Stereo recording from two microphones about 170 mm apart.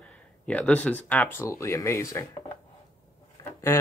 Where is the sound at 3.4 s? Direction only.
15° left (ahead or behind).